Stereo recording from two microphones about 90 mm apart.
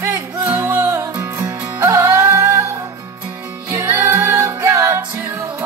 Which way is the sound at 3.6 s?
30° right (ahead or behind).